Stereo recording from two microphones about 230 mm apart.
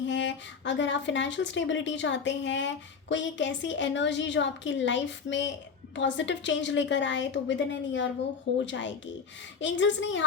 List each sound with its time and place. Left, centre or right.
0.1 s speech: left